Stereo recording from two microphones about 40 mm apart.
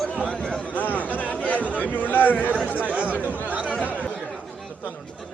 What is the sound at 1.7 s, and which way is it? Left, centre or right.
Speech, left.